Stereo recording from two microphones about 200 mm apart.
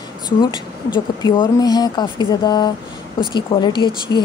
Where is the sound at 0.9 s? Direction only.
20° left (ahead or behind).